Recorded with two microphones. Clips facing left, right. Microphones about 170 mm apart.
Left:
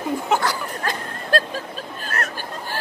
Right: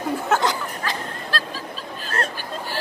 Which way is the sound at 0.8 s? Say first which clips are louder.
Left 2 dB; 50° left (ahead or behind).